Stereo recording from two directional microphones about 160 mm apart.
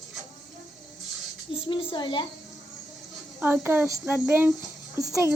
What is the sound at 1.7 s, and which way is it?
Speech, 30° left (ahead or behind).